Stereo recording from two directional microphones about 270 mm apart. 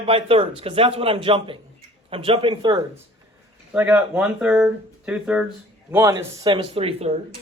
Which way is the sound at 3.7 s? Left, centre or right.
Centre.